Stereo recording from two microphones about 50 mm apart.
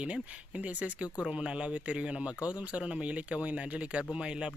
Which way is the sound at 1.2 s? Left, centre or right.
Centre.